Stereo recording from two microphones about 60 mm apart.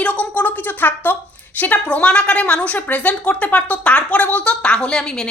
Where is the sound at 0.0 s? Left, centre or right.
Left.